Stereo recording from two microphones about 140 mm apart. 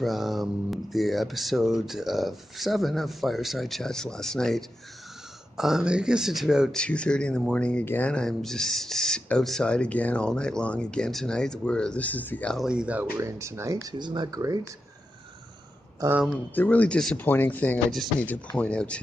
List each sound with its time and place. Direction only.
0.0 s speech: centre (ahead or behind)
12.5 s speech: 5° right (ahead or behind)
13.2 s speech: 20° right (ahead or behind)
16.5 s speech: 10° left (ahead or behind)